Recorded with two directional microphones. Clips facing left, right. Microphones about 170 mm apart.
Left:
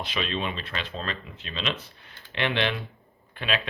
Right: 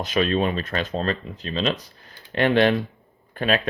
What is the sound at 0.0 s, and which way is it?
Speech, 45° right (ahead or behind).